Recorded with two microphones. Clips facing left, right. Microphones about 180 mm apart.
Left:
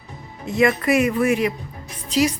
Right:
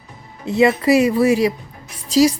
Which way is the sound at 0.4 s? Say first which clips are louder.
Right 4 dB; 30° right (ahead or behind).